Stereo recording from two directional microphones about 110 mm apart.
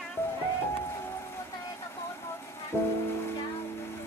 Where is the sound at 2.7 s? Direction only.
25° left (ahead or behind).